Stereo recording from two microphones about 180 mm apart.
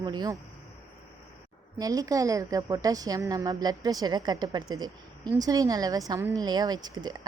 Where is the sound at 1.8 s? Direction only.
20° right (ahead or behind).